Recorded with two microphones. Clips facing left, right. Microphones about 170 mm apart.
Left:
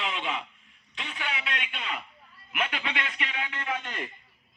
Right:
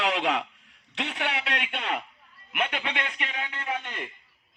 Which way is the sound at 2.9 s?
50° right (ahead or behind).